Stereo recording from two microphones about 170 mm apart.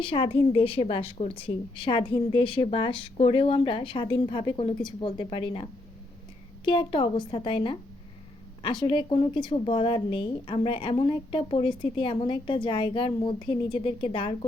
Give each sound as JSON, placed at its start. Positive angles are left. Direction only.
{"t": 0.0, "sound": "a woman's voice", "side_deg": 30}
{"t": 6.7, "sound": "speech", "side_deg": 30}